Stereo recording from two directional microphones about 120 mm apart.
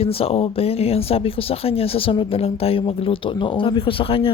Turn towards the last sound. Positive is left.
turn(degrees=50)  # may be behind; listen again after turning